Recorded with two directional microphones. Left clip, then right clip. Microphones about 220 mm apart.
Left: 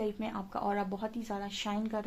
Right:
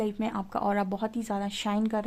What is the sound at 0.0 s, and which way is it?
Speech, 40° right (ahead or behind).